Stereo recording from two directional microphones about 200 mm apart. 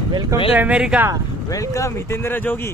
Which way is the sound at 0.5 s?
5° right (ahead or behind).